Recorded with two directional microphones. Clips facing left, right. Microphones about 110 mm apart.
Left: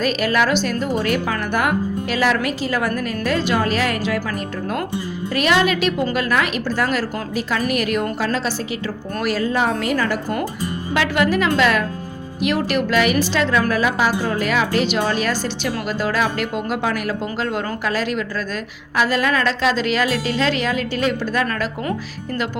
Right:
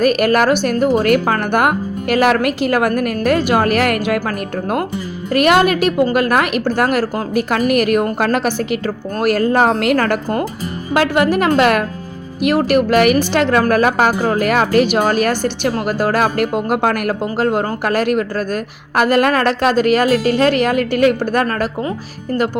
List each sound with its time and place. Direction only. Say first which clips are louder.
0.0 s a woman's voice: right 6 dB; 55° right (ahead or behind)
10.9 s a woman's voice: right 5 dB; 45° right (ahead or behind)